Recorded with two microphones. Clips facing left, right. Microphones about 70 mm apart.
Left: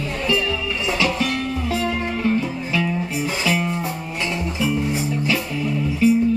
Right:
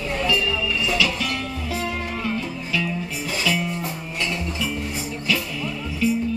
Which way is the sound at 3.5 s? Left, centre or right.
Left.